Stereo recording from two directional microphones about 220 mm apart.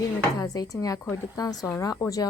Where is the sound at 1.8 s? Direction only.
15° left (ahead or behind).